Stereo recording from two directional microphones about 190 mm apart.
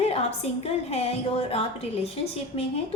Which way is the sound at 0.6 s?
35° left (ahead or behind).